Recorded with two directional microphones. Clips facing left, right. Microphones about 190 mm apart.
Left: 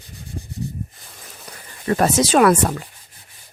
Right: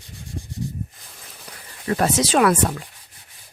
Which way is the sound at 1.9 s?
50° left (ahead or behind).